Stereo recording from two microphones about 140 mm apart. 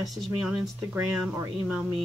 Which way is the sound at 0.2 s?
10° right (ahead or behind).